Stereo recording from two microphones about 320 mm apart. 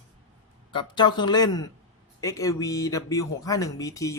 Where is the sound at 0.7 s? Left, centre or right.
Centre.